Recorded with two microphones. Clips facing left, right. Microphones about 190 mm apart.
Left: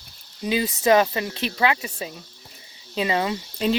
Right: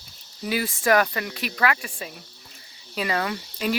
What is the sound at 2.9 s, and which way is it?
Cricket, 20° left (ahead or behind).